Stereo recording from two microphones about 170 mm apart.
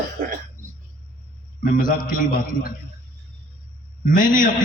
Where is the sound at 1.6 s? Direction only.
55° left (ahead or behind).